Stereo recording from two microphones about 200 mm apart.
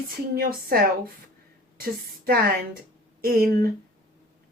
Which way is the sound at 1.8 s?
50° right (ahead or behind).